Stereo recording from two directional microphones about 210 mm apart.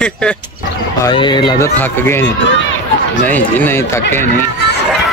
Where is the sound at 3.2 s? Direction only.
10° left (ahead or behind).